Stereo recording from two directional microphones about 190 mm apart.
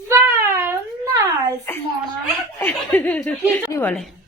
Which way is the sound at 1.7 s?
10° left (ahead or behind).